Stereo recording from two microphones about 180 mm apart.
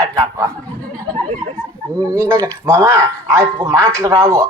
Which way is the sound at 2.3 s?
15° right (ahead or behind).